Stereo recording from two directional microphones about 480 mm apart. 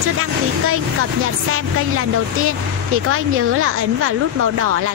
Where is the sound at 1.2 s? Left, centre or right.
Right.